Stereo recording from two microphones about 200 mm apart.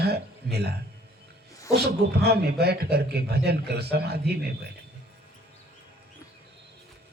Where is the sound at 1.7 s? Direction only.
55° right (ahead or behind).